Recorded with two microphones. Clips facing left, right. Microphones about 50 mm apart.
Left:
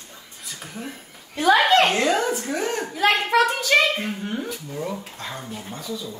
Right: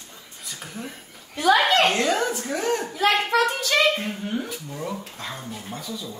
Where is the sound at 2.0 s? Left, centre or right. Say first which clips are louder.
Left 2 dB; centre.